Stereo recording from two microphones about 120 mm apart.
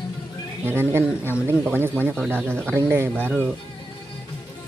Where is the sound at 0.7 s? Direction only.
20° right (ahead or behind).